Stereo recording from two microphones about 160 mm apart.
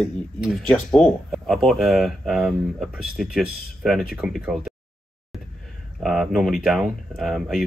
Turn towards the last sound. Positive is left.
turn(degrees=0)  # may be behind; listen again after turning